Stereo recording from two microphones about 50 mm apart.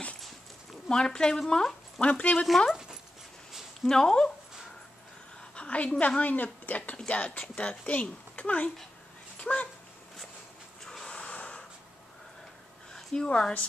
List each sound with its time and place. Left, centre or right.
0.8 s speech: centre
2.0 s speech: left
2.7 s dog: centre
3.8 s speech: centre
5.4 s a woman's voice: left
9.4 s a sound: left
10.8 s snort: centre
12.9 s a sound: centre
13.3 s speech: left